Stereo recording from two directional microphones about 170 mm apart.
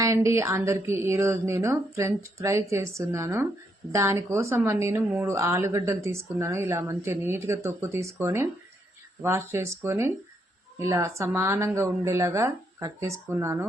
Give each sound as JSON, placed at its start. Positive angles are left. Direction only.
{"t": 0.0, "sound": "a woman's voice", "side_deg": -15}